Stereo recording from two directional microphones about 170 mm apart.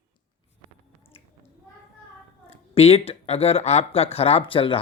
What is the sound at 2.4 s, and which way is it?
Speech, 35° left (ahead or behind).